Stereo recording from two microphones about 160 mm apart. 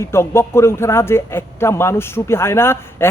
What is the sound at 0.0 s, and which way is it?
A man's voice, 15° left (ahead or behind).